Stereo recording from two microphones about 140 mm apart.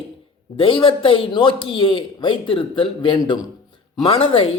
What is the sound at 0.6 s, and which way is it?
A man's voice, 40° left (ahead or behind).